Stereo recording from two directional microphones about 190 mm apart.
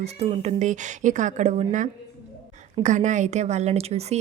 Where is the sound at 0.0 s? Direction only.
35° right (ahead or behind).